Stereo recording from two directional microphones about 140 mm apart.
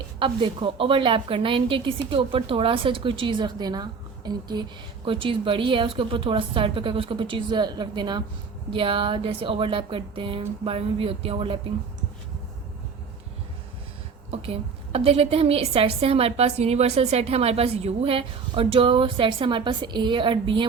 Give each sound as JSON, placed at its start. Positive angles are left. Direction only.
{"t": 0.2, "sound": "a woman's voice", "side_deg": -35}
{"t": 14.3, "sound": "a woman's voice", "side_deg": -45}